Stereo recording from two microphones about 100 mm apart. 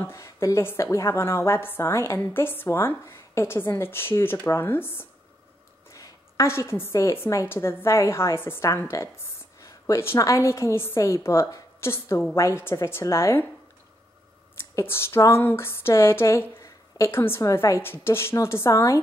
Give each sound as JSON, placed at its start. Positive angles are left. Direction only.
{"t": 0.0, "sound": "a woman's voice", "side_deg": 30}
{"t": 14.8, "sound": "a woman's voice", "side_deg": 25}